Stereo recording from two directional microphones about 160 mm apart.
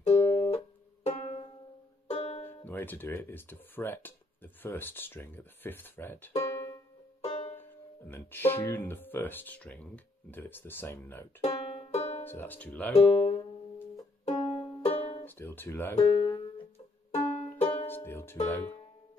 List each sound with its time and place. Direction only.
0.3 s music: 40° left (ahead or behind)
2.4 s speech: 15° left (ahead or behind)
7.2 s music: 40° left (ahead or behind)
8.1 s speech: 15° left (ahead or behind)
11.4 s music: 40° left (ahead or behind)
12.3 s speech: 10° left (ahead or behind)
12.9 s speech: 40° left (ahead or behind)
14.2 s music: 40° left (ahead or behind)
15.2 s speech: 15° left (ahead or behind)
16.0 s music: 30° left (ahead or behind)
17.3 s music: 40° left (ahead or behind)
17.8 s music: 15° left (ahead or behind)
18.5 s speech: 15° left (ahead or behind)